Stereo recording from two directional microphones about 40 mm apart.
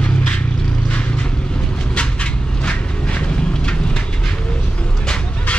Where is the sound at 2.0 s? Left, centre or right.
Left.